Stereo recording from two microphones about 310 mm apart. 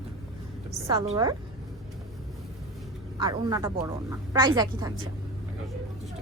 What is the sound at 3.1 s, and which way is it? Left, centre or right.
A woman's voice, centre.